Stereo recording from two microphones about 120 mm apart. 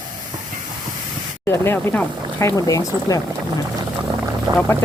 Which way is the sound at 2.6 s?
30° left (ahead or behind).